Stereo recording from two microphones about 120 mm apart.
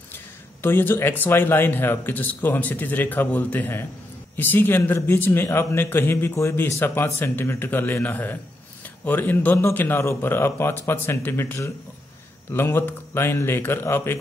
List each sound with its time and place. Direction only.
0.6 s a man's voice: 20° left (ahead or behind)